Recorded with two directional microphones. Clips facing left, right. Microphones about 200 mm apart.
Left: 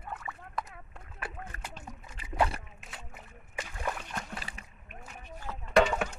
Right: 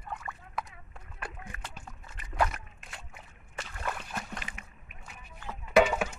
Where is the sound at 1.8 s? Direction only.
10° left (ahead or behind).